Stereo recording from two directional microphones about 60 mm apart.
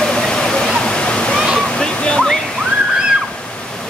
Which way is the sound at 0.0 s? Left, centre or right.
Centre.